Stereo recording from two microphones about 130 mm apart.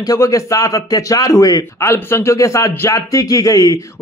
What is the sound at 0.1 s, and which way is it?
Speech, 25° left (ahead or behind).